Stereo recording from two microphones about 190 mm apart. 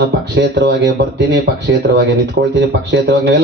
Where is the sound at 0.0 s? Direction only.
60° right (ahead or behind).